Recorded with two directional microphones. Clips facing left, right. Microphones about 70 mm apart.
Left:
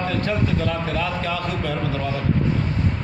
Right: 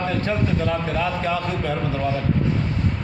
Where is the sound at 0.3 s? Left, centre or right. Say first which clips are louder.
Right 1 dB; centre.